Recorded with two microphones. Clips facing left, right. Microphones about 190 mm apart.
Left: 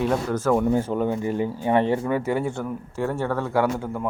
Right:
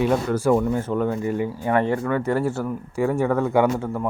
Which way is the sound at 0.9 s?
20° left (ahead or behind).